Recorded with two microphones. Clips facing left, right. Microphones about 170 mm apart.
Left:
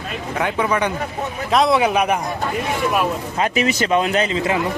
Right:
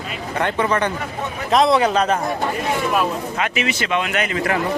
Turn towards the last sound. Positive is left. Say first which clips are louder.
# left 2 dB
turn(degrees=20)  # may be behind; listen again after turning